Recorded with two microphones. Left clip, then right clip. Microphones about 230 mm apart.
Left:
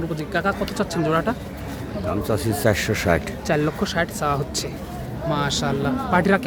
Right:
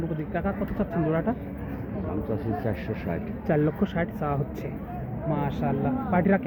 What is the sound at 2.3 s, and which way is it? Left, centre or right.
Speech, left.